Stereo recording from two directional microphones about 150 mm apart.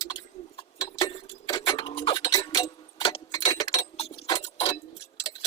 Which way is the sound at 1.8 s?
35° left (ahead or behind).